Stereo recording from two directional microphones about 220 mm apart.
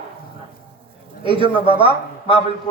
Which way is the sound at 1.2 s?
20° right (ahead or behind).